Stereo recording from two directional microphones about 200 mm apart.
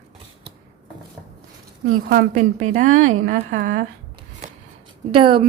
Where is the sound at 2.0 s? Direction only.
45° right (ahead or behind).